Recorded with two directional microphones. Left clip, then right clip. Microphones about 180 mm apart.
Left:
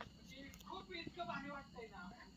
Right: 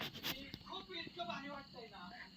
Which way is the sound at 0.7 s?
35° right (ahead or behind).